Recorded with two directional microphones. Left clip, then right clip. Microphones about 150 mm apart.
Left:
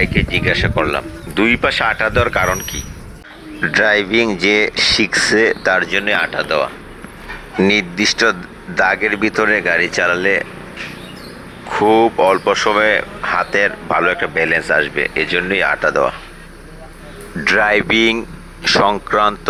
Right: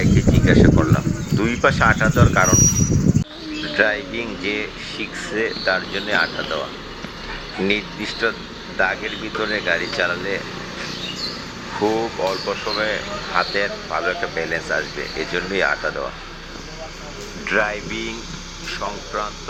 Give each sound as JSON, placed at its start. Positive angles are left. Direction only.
{"t": 0.0, "sound": "speech", "side_deg": 35}
{"t": 3.8, "sound": "speech", "side_deg": 65}
{"t": 5.9, "sound": "speech", "side_deg": 45}
{"t": 7.7, "sound": "speech", "side_deg": 65}
{"t": 11.9, "sound": "speech", "side_deg": 55}
{"t": 17.4, "sound": "speech", "side_deg": 85}